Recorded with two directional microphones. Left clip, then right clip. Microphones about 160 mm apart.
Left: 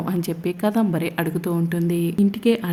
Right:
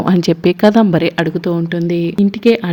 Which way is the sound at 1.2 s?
25° right (ahead or behind).